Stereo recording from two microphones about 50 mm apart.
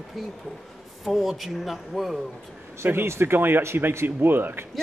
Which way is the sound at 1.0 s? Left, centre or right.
Centre.